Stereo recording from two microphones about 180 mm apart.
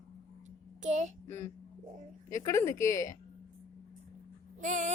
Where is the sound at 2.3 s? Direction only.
15° left (ahead or behind).